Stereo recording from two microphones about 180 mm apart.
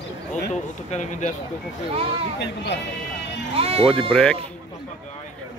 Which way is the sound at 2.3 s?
70° left (ahead or behind).